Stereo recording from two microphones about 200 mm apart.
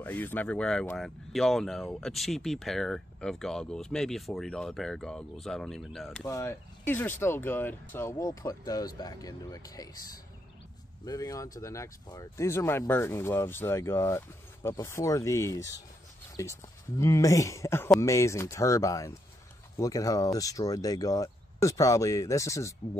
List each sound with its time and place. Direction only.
0.0 s speech: 10° left (ahead or behind)
6.2 s speech: 15° left (ahead or behind)